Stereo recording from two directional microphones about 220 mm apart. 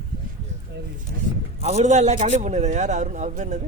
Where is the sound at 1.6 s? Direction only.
30° right (ahead or behind).